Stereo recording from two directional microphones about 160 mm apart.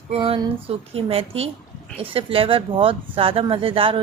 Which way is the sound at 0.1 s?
35° right (ahead or behind).